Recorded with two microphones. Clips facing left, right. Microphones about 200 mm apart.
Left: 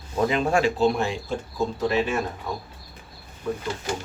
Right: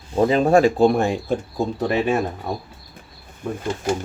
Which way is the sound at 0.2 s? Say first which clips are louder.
Right 7 dB; 35° right (ahead or behind).